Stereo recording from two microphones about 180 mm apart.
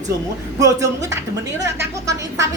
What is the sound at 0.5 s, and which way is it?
A woman's voice, 20° right (ahead or behind).